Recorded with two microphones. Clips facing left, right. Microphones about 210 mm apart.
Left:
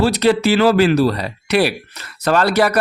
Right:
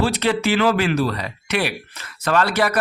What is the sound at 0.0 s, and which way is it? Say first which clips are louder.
Speech: left 5 dB; 40° left (ahead or behind).